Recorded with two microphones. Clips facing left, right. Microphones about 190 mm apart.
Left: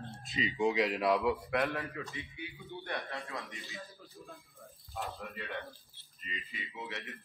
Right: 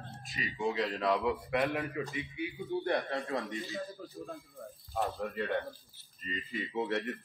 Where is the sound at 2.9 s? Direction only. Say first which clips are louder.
Right 4 dB; 35° right (ahead or behind).